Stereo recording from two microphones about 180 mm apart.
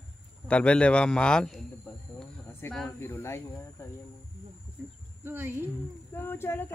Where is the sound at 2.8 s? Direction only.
15° left (ahead or behind).